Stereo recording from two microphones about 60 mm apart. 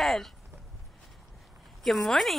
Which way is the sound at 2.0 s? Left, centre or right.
Centre.